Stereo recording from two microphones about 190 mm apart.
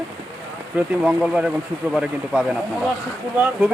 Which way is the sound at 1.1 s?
5° right (ahead or behind).